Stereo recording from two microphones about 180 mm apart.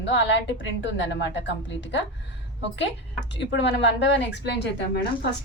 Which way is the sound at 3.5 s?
80° left.